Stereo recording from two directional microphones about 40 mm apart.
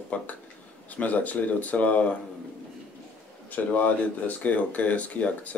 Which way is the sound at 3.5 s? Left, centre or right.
Left.